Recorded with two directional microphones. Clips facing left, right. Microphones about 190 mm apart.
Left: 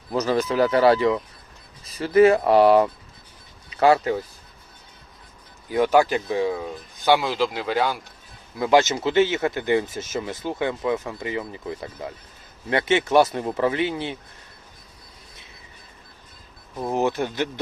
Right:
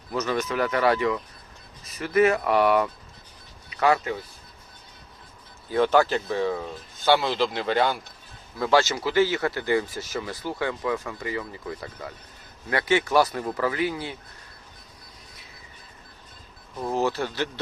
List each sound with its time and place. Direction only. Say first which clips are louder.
0.1 s speech: left 4 dB; 35° left (ahead or behind)
5.6 s speech: left 2 dB; 15° left (ahead or behind)
8.5 s speech: left 3 dB; 15° left (ahead or behind)
16.7 s speech: left 2 dB; 20° left (ahead or behind)